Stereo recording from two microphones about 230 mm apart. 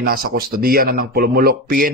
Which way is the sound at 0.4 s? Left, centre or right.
Right.